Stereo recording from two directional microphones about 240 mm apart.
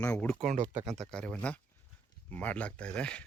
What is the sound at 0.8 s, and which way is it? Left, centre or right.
Speech, centre.